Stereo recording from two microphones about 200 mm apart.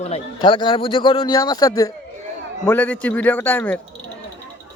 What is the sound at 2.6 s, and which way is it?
A man's voice, 5° left (ahead or behind).